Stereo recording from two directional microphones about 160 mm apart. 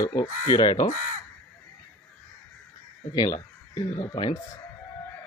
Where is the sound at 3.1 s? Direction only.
20° left (ahead or behind).